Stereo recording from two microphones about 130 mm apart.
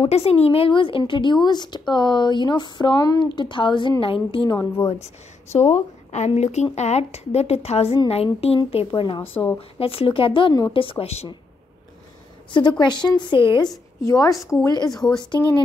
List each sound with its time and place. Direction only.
0.0 s a woman's voice: 50° left (ahead or behind)
5.0 s a woman's voice: 60° left (ahead or behind); by 9.2 s 40° left (ahead or behind)
9.2 s a woman's voice: 15° left (ahead or behind)
9.6 s speech: 45° left (ahead or behind)
12.4 s a woman's voice: 35° left (ahead or behind)
14.0 s speech: 25° left (ahead or behind)
14.9 s speech: 5° left (ahead or behind)